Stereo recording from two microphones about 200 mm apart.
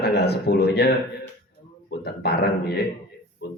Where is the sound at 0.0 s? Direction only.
55° left (ahead or behind).